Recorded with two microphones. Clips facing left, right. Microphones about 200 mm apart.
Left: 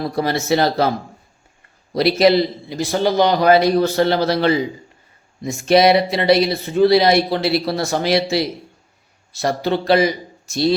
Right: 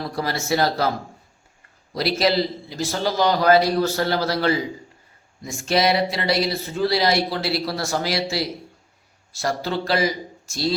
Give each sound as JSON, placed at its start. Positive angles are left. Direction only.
{"t": 0.2, "sound": "a man's voice", "side_deg": 20}
{"t": 1.9, "sound": "a man's voice", "side_deg": 20}